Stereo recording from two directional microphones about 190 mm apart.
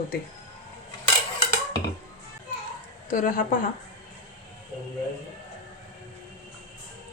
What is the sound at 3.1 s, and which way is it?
Speech, 45° left (ahead or behind).